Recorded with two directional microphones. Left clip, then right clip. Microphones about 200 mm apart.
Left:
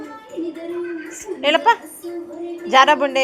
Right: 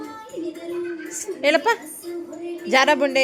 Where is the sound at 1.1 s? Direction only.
25° right (ahead or behind).